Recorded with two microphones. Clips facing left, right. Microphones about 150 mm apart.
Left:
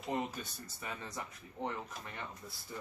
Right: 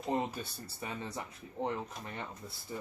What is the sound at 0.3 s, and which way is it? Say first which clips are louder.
Speech: right 4 dB; 30° right (ahead or behind).